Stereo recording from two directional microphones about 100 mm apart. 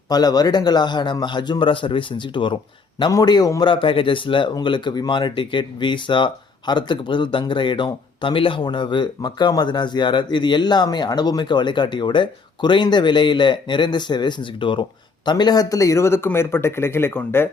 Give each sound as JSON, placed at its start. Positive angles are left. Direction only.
{"t": 0.1, "sound": "speech", "side_deg": 40}
{"t": 3.1, "sound": "a man's voice", "side_deg": 40}
{"t": 3.6, "sound": "a man's voice", "side_deg": 60}